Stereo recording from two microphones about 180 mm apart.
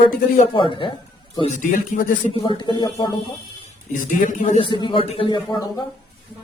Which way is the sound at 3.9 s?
45° left (ahead or behind).